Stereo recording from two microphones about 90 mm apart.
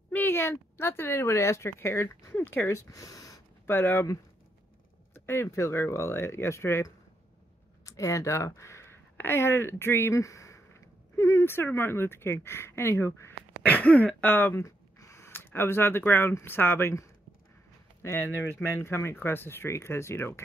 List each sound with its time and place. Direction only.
0.1 s a woman's voice: 25° left (ahead or behind); by 3.3 s 40° left (ahead or behind)
3.6 s speech: 25° left (ahead or behind)
5.1 s speech: 25° left (ahead or behind)
13.7 s speech: 15° left (ahead or behind)
18.0 s speech: 30° left (ahead or behind)